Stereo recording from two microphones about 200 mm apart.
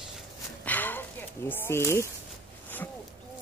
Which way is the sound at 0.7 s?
10° left (ahead or behind).